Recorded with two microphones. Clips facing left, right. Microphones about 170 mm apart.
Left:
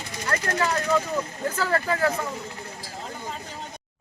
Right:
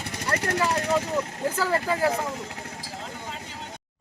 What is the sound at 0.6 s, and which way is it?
Speech, 10° right (ahead or behind).